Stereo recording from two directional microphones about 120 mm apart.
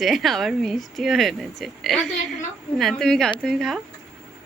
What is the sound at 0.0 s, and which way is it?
Speech, centre (ahead or behind).